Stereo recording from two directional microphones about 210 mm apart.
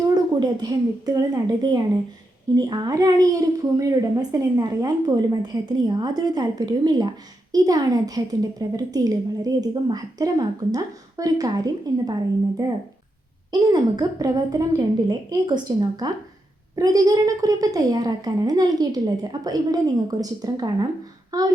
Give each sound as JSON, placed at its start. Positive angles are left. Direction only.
{"t": 0.1, "sound": "a woman's voice", "side_deg": -20}